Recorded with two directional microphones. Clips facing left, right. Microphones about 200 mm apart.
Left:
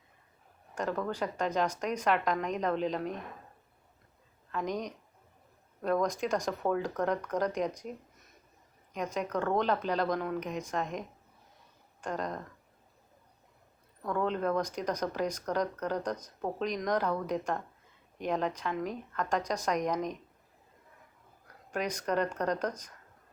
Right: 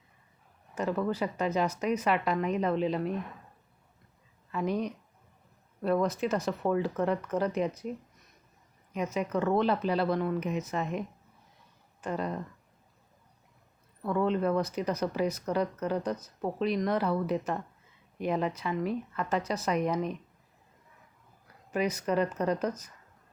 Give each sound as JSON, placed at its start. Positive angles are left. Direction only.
{"t": 0.8, "sound": "speech", "side_deg": -5}
{"t": 4.5, "sound": "speech", "side_deg": -5}
{"t": 9.1, "sound": "speech", "side_deg": -5}
{"t": 14.0, "sound": "speech", "side_deg": -5}
{"t": 21.4, "sound": "speech", "side_deg": -5}